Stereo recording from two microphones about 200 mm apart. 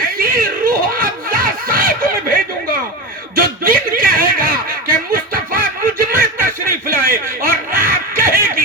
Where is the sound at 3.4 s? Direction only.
45° right (ahead or behind).